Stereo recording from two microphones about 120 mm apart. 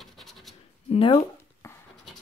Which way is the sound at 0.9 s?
50° left (ahead or behind).